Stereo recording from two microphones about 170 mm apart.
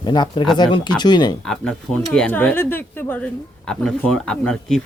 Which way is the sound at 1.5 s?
5° left (ahead or behind).